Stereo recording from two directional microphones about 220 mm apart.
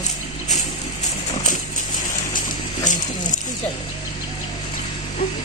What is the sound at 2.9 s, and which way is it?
Speech, 35° left (ahead or behind).